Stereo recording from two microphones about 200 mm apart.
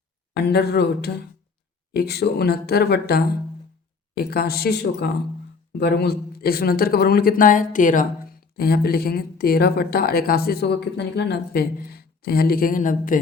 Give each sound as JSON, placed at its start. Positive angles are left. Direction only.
{"t": 0.4, "sound": "speech", "side_deg": 55}